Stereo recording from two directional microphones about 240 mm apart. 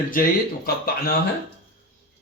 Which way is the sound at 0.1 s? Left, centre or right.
Left.